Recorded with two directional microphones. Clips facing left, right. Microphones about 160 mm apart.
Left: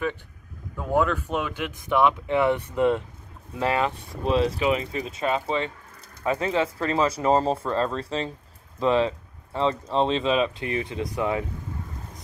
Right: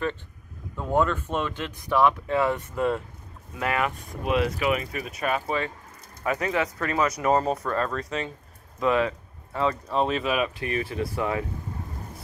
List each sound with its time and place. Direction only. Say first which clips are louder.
0.7 s speech: left 1 dB; 5° left (ahead or behind)